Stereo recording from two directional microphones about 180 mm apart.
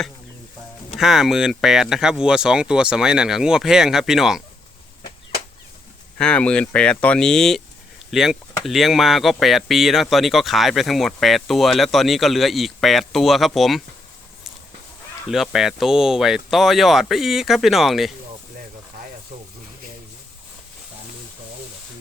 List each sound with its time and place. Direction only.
0.9 s speech: centre (ahead or behind)
6.1 s speech: 5° left (ahead or behind)
15.3 s speech: centre (ahead or behind)